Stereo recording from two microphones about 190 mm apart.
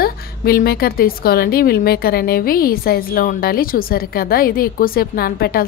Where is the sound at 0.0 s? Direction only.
55° left (ahead or behind).